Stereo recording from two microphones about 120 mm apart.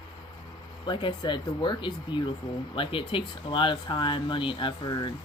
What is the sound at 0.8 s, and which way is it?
Speech, 40° left (ahead or behind).